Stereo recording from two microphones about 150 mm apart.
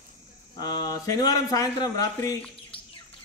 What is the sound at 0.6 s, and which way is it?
A man's voice, 25° left (ahead or behind).